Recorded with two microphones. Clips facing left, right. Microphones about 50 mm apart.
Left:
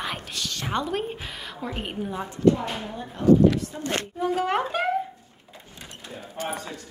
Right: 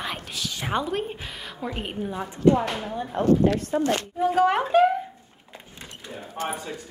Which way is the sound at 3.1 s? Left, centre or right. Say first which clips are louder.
Left 2 dB; right.